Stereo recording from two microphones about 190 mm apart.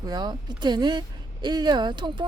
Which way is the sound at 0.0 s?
20° right (ahead or behind).